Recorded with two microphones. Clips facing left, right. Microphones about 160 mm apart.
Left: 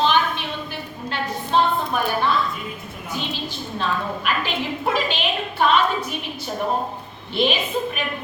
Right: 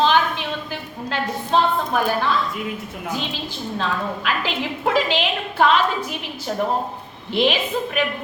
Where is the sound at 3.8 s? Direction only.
90° right.